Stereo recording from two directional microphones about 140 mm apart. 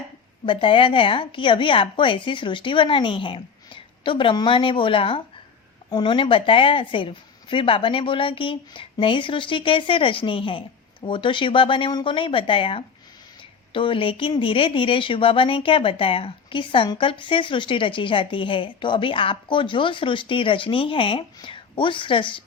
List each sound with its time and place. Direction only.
0.4 s a woman's voice: 35° left (ahead or behind)